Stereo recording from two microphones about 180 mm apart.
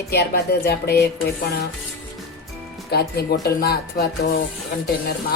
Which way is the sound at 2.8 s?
60° left (ahead or behind).